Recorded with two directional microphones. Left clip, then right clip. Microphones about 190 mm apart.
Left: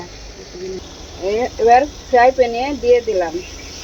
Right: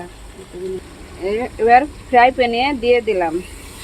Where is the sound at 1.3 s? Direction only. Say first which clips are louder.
Left 1 dB; 35° right (ahead or behind).